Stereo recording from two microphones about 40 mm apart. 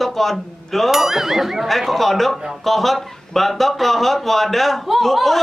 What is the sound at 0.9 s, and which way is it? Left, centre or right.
Speech, centre.